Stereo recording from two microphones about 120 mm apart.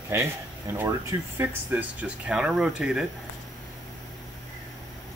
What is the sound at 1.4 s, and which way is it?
Speech, 15° right (ahead or behind).